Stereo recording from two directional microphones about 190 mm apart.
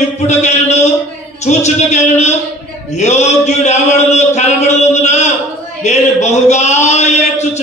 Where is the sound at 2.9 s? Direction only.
35° left (ahead or behind).